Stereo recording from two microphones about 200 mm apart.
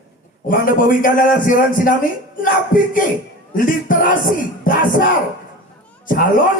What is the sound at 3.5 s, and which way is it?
Speech, 40° left (ahead or behind).